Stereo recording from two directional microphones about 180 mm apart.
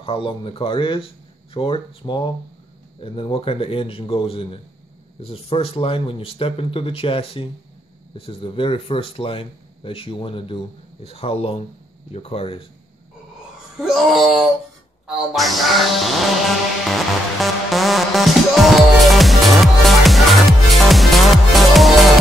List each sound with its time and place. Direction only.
0.0 s speech: 30° left (ahead or behind)
13.9 s music: centre (ahead or behind)